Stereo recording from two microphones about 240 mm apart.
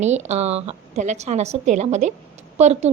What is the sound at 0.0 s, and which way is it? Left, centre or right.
A woman's voice, right.